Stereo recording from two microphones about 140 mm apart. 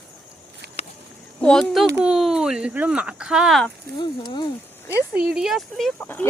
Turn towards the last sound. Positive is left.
turn(degrees=15)  # may be behind; listen again after turning